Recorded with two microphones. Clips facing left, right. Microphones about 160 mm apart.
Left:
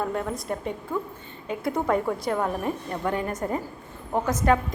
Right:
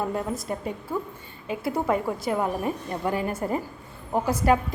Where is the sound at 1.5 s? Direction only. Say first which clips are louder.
Even; 5° right (ahead or behind).